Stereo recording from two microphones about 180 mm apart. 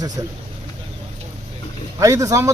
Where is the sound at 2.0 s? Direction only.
20° right (ahead or behind).